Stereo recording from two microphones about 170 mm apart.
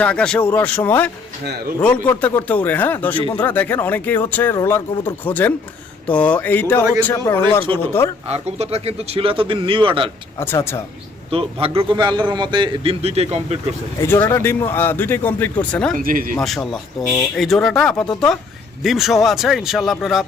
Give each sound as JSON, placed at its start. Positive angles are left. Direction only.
{"t": 0.0, "sound": "speech", "side_deg": 5}
{"t": 1.5, "sound": "speech", "side_deg": -70}
{"t": 2.0, "sound": "speech", "side_deg": 10}
{"t": 8.3, "sound": "speech", "side_deg": -40}
{"t": 10.3, "sound": "speech", "side_deg": 15}
{"t": 11.3, "sound": "speech", "side_deg": -35}
{"t": 14.0, "sound": "speech", "side_deg": 15}
{"t": 16.0, "sound": "speech", "side_deg": -55}
{"t": 16.4, "sound": "speech", "side_deg": 0}